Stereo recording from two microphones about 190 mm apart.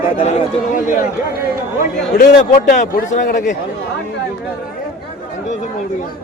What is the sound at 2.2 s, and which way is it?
A man's voice, 45° left (ahead or behind).